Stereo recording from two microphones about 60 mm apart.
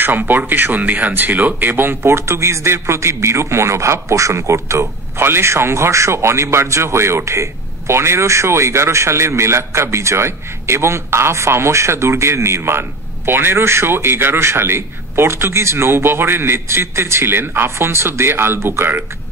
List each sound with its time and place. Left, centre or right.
0.0 s speech: right